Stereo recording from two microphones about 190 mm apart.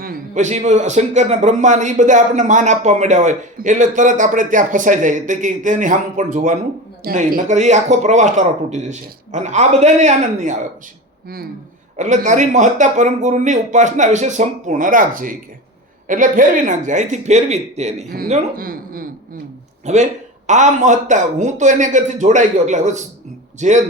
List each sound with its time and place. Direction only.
0.0 s a man's voice: 45° right (ahead or behind)
11.9 s a man's voice: 40° right (ahead or behind)
19.8 s a man's voice: 35° right (ahead or behind)